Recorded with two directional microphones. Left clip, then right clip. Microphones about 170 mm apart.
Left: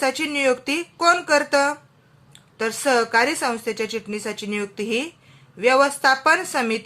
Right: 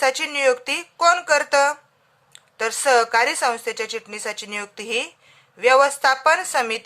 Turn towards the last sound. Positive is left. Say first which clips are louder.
# right 1 dB
turn(degrees=-20)  # may be behind; listen again after turning